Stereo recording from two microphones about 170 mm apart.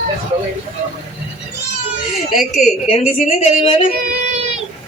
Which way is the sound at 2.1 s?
Centre (ahead or behind).